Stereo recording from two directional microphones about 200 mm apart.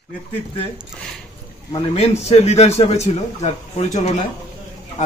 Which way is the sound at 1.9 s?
30° left (ahead or behind).